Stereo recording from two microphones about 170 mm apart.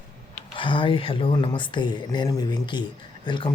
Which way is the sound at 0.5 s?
30° left (ahead or behind).